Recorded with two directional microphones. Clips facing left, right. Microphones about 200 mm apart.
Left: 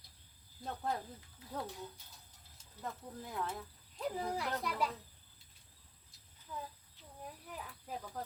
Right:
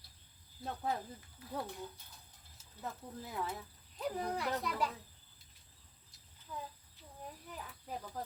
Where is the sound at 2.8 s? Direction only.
5° right (ahead or behind).